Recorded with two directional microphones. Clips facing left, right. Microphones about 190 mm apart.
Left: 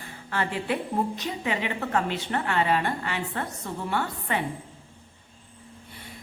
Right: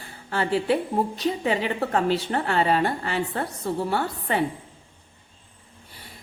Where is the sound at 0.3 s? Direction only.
30° right (ahead or behind).